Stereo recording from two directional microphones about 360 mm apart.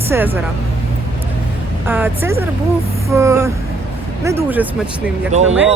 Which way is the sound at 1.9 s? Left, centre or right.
Centre.